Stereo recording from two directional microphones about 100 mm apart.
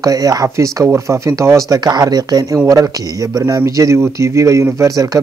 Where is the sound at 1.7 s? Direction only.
40° right (ahead or behind).